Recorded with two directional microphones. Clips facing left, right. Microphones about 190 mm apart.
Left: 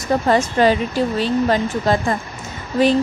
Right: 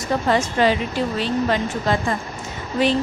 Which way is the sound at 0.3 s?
40° left (ahead or behind).